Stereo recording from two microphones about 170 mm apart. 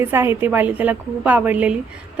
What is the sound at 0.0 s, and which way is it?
Speech, 15° right (ahead or behind).